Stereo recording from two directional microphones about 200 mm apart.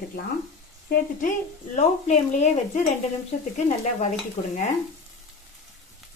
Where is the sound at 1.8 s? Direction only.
35° left (ahead or behind).